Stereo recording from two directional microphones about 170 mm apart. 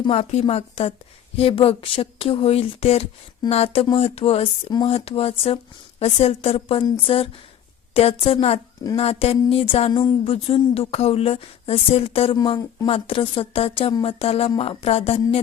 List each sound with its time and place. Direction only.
0.1 s speech: 40° left (ahead or behind)